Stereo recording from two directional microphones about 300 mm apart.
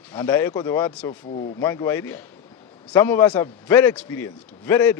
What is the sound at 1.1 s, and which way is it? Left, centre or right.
Speech, left.